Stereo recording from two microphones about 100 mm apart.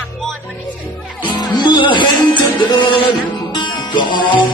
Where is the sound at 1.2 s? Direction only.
50° left (ahead or behind).